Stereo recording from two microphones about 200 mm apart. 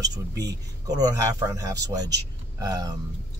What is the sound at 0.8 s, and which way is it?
Speech, 15° right (ahead or behind).